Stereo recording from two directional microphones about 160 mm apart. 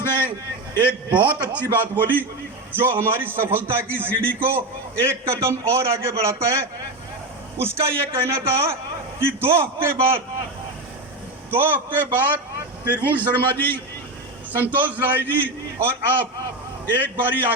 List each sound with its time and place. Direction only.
1.1 s a man's voice: 10° right (ahead or behind)
7.6 s a man's voice: 15° right (ahead or behind)
11.5 s a man's voice: 10° right (ahead or behind)
13.3 s a man's voice: 10° left (ahead or behind)
14.5 s a man's voice: 10° right (ahead or behind)